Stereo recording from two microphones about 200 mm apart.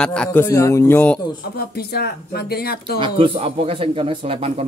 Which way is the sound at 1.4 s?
50° left (ahead or behind).